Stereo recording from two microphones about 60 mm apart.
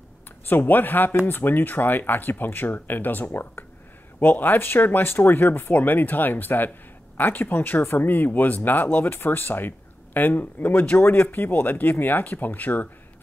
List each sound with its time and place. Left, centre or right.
0.5 s speech: left